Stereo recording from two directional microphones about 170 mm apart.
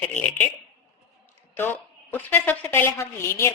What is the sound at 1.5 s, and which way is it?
A woman's voice, 10° left (ahead or behind).